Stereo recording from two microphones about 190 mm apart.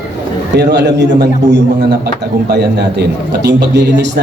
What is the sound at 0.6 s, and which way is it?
A man's voice, 65° right (ahead or behind).